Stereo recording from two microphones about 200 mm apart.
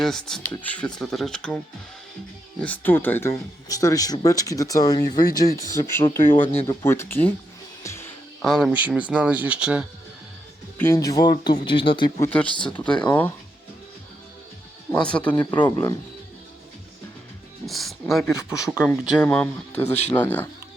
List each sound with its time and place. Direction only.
0.0 s speech: centre (ahead or behind)
6.3 s a man's voice: 25° left (ahead or behind)
6.7 s speech: 10° left (ahead or behind)
7.9 s music: 10° left (ahead or behind)
8.4 s speech: centre (ahead or behind)
10.8 s a man's voice: 15° left (ahead or behind)
12.3 s speech: 5° left (ahead or behind)
14.9 s speech: 5° left (ahead or behind)
17.7 s speech: centre (ahead or behind)
18.3 s speech: 15° left (ahead or behind)